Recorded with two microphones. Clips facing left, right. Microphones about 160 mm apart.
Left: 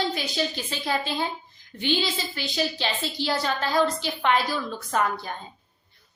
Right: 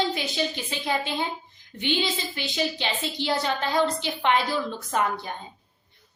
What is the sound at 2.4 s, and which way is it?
A woman's voice, 20° right (ahead or behind).